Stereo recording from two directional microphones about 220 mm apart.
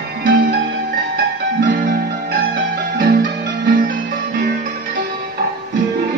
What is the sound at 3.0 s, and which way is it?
Music, 40° right (ahead or behind).